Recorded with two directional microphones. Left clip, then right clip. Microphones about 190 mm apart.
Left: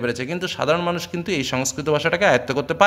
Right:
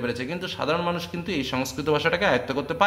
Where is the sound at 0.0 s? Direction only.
40° left (ahead or behind).